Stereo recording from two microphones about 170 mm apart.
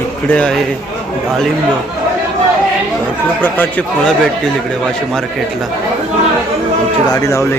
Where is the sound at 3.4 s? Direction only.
10° left (ahead or behind).